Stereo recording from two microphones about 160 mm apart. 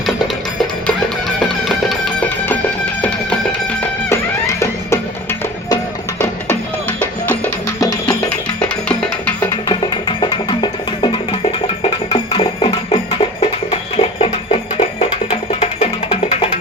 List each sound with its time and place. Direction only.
1.4 s music: centre (ahead or behind)
9.6 s music: 30° left (ahead or behind); by 15.9 s 45° left (ahead or behind)